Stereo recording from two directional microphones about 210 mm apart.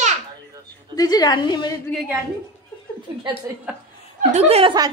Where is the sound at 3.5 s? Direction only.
10° right (ahead or behind).